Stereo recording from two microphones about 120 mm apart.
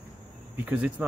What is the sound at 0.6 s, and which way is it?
Speech, 15° right (ahead or behind).